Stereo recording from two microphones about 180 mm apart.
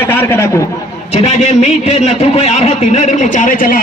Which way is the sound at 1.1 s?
40° left (ahead or behind).